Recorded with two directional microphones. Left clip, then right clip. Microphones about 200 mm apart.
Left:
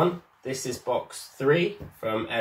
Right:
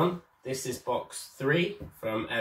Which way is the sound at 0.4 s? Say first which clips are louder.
Left 2 dB; 10° left (ahead or behind).